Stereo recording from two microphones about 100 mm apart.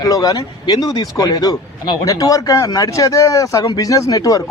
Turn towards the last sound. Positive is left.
turn(degrees=35)  # may be behind; listen again after turning